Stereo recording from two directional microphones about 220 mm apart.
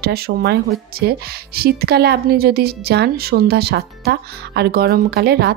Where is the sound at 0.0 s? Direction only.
45° right (ahead or behind).